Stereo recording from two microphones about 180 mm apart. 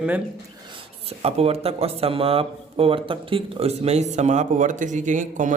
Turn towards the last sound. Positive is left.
turn(degrees=-45)  # may be behind; listen again after turning